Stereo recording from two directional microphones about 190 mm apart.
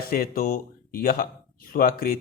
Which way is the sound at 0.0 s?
50° left (ahead or behind).